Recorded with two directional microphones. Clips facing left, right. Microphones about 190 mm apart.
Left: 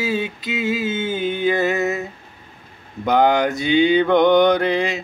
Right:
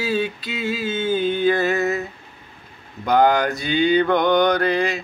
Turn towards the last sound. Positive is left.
turn(degrees=20)  # may be behind; listen again after turning